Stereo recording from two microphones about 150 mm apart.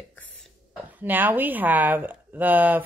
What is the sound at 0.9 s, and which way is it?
Speech, 10° right (ahead or behind).